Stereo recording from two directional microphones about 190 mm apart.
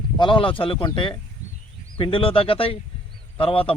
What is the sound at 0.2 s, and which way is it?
A man's voice, 25° left (ahead or behind).